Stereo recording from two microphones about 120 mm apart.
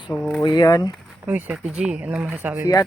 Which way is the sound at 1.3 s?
15° right (ahead or behind).